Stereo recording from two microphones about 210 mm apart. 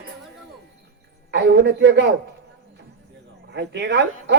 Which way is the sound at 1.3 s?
55° right (ahead or behind).